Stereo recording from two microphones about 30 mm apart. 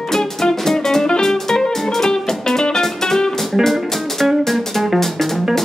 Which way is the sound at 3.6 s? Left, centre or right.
Centre.